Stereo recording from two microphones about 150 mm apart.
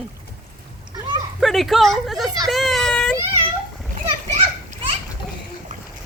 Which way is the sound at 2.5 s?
Centre (ahead or behind).